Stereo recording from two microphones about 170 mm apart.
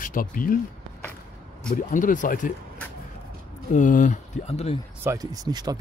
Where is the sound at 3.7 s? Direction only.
50° left (ahead or behind).